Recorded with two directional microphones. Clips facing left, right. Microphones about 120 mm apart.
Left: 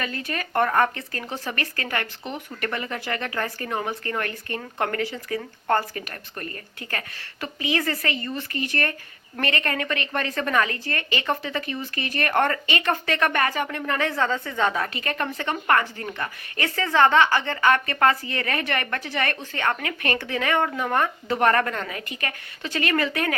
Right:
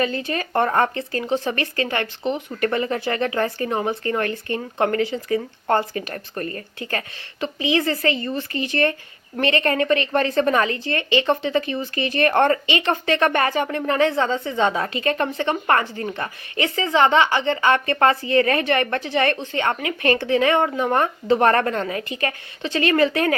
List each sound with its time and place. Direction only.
0.0 s a woman's voice: 25° right (ahead or behind)